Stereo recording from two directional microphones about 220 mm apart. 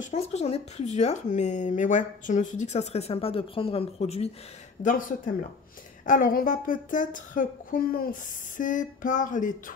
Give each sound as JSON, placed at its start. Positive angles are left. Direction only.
{"t": 0.0, "sound": "speech", "side_deg": 30}